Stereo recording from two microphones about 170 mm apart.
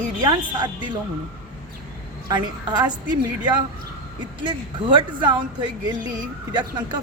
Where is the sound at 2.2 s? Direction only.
25° right (ahead or behind).